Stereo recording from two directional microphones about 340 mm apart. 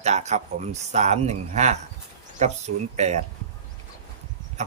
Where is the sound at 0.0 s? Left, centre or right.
Centre.